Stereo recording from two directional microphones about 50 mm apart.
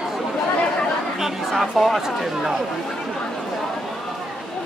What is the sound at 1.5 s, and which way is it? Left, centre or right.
Speech, centre.